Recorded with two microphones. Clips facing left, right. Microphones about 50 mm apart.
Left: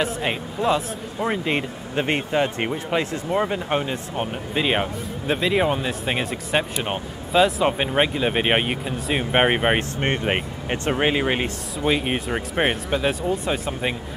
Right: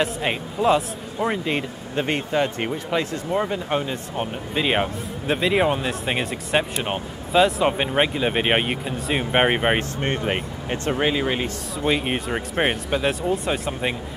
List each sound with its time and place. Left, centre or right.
0.0 s speech: centre
1.4 s speech: centre
9.9 s speech: left
11.8 s speech: centre